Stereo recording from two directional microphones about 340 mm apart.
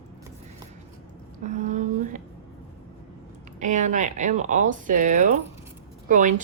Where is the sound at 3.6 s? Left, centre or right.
Right.